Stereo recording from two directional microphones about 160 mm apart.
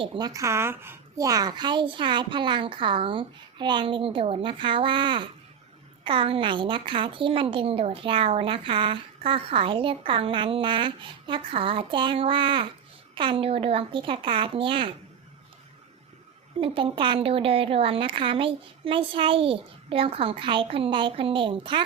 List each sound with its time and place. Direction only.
0.0 s a woman's voice: 30° right (ahead or behind)
16.6 s a woman's voice: 35° right (ahead or behind)